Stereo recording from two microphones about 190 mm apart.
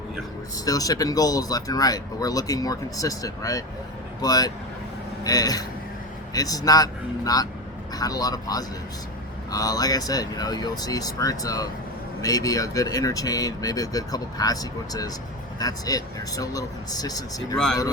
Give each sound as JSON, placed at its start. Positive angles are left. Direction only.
{"t": 0.6, "sound": "speech", "side_deg": 20}